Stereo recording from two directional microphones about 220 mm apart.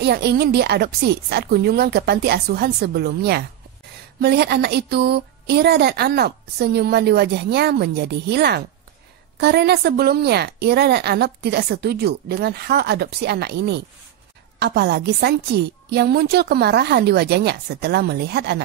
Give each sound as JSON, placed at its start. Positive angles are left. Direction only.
{"t": 0.0, "sound": "a woman's voice", "side_deg": -50}